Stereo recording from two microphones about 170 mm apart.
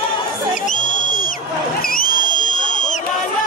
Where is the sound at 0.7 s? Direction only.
50° left (ahead or behind).